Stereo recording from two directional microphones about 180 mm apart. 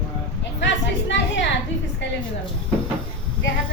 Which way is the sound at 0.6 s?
90° left.